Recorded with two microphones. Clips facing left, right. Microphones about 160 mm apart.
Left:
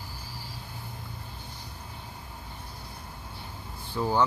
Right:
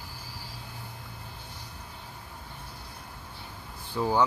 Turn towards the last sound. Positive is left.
turn(degrees=-10)  # may be behind; listen again after turning